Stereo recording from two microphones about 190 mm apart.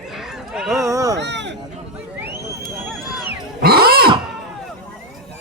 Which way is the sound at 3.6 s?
55° right (ahead or behind).